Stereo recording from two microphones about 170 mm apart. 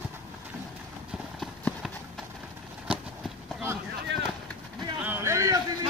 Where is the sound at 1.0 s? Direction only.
Centre (ahead or behind).